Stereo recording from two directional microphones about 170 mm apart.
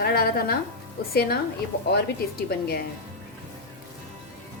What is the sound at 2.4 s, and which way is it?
Speech, 65° left (ahead or behind).